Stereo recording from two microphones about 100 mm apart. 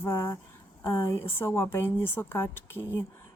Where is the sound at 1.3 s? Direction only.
25° left (ahead or behind).